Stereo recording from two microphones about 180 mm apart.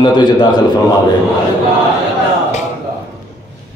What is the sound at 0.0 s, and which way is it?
Speech, 25° left (ahead or behind).